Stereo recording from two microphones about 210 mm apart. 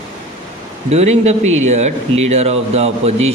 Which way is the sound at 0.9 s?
30° right (ahead or behind).